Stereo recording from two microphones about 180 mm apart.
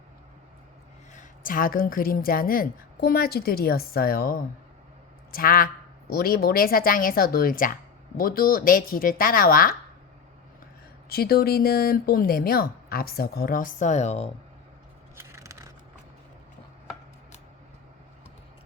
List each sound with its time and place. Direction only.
1.1 s a woman's voice: 50° left (ahead or behind)
11.1 s a woman's voice: 60° left (ahead or behind); by 14.3 s 35° left (ahead or behind)
15.2 s scissors: 15° right (ahead or behind)